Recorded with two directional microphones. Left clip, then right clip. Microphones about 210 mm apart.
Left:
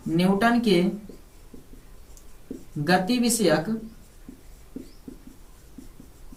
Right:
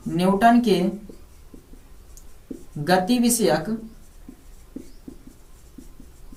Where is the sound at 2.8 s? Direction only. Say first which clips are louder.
Right 3 dB; 20° left (ahead or behind).